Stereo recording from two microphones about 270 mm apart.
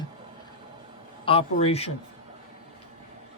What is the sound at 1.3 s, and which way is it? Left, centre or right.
Speech, left.